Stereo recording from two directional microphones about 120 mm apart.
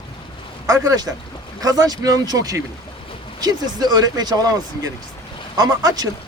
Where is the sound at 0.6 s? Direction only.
30° right (ahead or behind).